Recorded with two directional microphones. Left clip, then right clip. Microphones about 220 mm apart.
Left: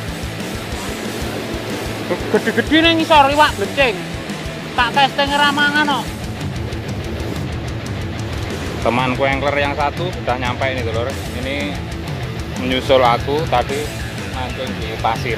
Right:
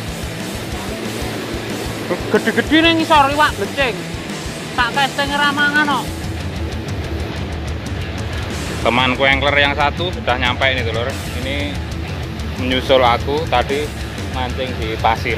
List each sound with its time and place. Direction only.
2.3 s speech: 15° right (ahead or behind)
3.1 s speech: 10° left (ahead or behind)
8.8 s speech: 5° left (ahead or behind)
15.0 s speech: 20° right (ahead or behind)